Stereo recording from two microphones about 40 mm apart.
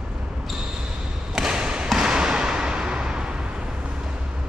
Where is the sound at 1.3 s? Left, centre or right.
Centre.